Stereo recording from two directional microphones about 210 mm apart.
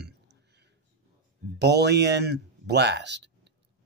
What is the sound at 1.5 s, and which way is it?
Speech, 55° right (ahead or behind).